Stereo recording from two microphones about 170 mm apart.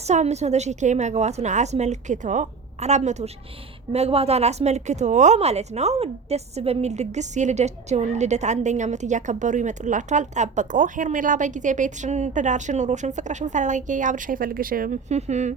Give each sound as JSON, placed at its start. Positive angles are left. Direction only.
{"t": 0.1, "sound": "speech", "side_deg": -40}
{"t": 15.1, "sound": "speech", "side_deg": -40}